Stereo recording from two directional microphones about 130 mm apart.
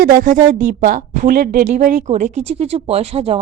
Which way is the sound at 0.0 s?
90° right.